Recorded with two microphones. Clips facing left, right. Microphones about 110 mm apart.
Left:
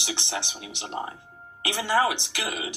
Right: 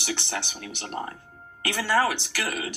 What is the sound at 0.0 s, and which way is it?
Speech, 20° left (ahead or behind).